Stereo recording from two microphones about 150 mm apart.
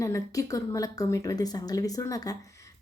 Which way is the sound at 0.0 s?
20° left (ahead or behind).